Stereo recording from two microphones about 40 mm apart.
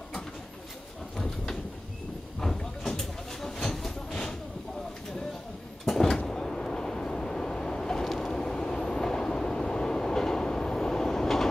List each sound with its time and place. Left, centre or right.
1.1 s a sound: centre
3.6 s train: centre
5.9 s vehicle: centre
8.0 s vehicle: centre
8.3 s vehicle: centre